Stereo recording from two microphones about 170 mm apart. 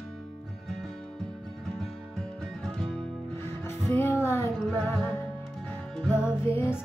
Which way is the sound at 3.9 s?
15° left (ahead or behind).